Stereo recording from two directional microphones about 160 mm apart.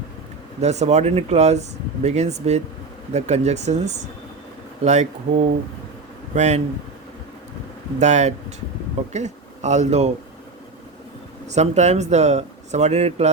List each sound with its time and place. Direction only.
0.6 s speech: 45° right (ahead or behind)
7.9 s speech: 45° right (ahead or behind)
11.4 s speech: 45° right (ahead or behind)